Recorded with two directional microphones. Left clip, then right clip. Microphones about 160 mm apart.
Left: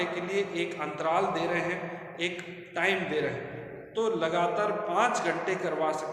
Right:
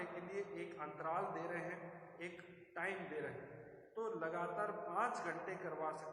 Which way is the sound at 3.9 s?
30° left (ahead or behind).